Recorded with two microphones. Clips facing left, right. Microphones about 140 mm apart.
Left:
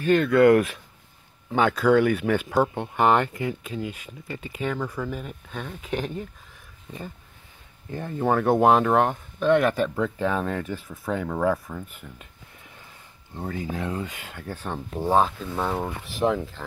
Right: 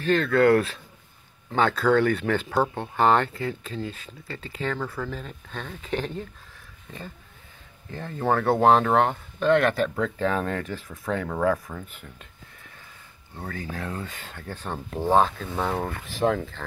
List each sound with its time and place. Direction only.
0.0 s speech: 10° left (ahead or behind)
13.4 s speech: 20° left (ahead or behind)